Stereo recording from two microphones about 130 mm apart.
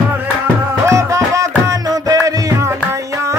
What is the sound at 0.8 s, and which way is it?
Music, 25° right (ahead or behind).